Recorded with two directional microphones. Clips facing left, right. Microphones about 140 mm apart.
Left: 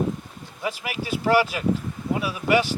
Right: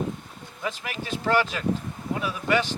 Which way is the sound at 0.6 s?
10° left (ahead or behind).